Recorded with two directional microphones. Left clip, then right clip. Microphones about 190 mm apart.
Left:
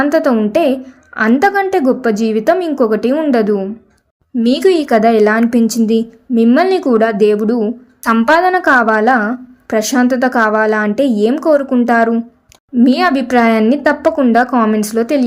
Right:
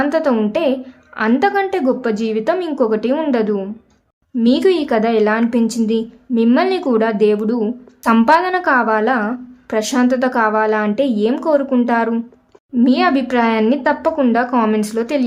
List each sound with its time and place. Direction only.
0.0 s speech: 20° left (ahead or behind)